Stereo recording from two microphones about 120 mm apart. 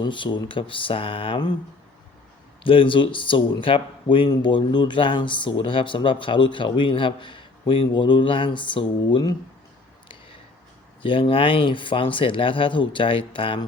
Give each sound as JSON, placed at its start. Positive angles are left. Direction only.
{"t": 0.0, "sound": "speech", "side_deg": 40}
{"t": 2.6, "sound": "speech", "side_deg": 45}
{"t": 11.0, "sound": "speech", "side_deg": 50}